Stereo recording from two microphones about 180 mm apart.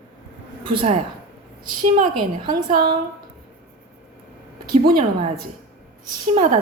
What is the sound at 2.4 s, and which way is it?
Speech, 25° right (ahead or behind).